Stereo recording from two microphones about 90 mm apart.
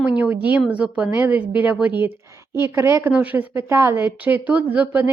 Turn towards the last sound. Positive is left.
turn(degrees=-15)  # may be behind; listen again after turning